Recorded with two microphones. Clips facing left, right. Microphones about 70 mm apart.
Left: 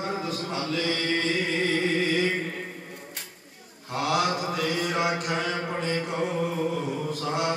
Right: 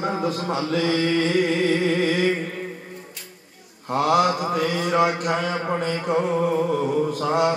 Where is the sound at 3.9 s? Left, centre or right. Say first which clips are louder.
Right 6 dB; right.